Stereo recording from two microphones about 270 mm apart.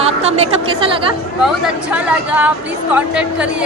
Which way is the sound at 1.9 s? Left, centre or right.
Centre.